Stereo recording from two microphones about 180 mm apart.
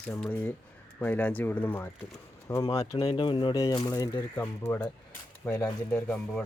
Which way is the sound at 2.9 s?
30° left (ahead or behind).